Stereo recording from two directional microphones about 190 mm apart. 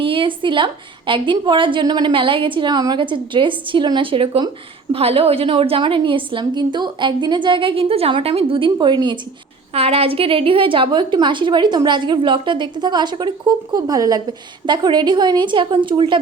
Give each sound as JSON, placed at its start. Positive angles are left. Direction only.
{"t": 0.0, "sound": "a woman's voice", "side_deg": -25}